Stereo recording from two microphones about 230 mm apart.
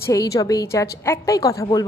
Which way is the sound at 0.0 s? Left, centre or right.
Centre.